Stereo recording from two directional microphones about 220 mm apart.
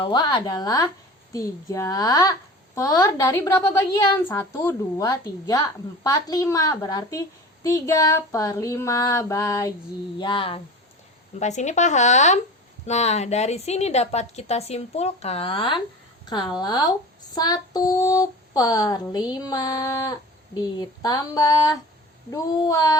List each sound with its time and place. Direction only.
0.0 s a woman's voice: 20° left (ahead or behind)